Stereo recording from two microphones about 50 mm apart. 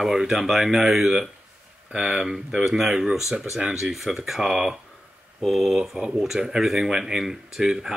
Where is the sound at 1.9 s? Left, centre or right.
Centre.